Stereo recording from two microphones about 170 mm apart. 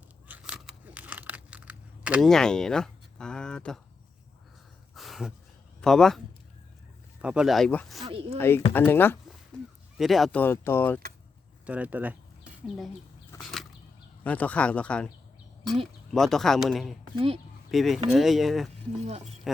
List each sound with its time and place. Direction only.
0.3 s a sound: 10° right (ahead or behind)
2.2 s speech: 5° left (ahead or behind)
4.9 s a sound: centre (ahead or behind)
5.8 s speech: 5° left (ahead or behind)
8.0 s speech: 35° right (ahead or behind)
8.4 s speech: 15° left (ahead or behind)
10.0 s speech: centre (ahead or behind)
10.4 s speech: 15° left (ahead or behind)
11.6 s speech: 10° right (ahead or behind)
13.4 s a sound: centre (ahead or behind)
14.3 s speech: 10° left (ahead or behind)
16.1 s speech: centre (ahead or behind)
17.2 s speech: 35° right (ahead or behind)
17.7 s speech: centre (ahead or behind)